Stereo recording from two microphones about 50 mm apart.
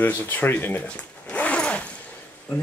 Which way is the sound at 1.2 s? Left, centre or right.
Left.